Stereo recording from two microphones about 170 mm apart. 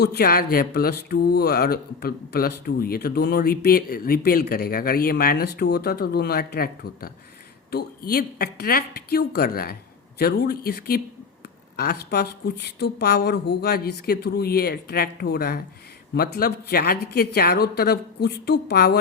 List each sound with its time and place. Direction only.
0.0 s speech: 70° left (ahead or behind)